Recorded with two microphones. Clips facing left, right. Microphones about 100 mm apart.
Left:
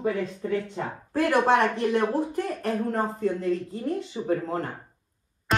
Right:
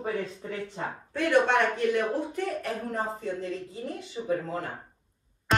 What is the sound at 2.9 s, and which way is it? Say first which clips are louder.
Speech: left 5 dB; 70° left (ahead or behind).